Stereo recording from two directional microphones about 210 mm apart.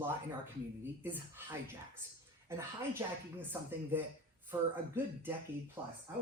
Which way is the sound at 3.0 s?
10° right (ahead or behind).